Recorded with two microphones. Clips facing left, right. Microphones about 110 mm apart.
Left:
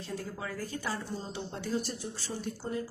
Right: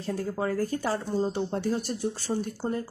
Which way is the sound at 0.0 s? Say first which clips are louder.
Right 9 dB; 45° right (ahead or behind).